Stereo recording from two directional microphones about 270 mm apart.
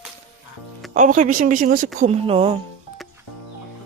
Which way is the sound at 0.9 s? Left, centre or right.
Right.